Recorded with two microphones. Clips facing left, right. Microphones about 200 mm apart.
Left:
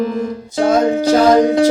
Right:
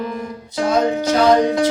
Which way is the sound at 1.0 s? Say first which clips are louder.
Left 4 dB; 45° left (ahead or behind).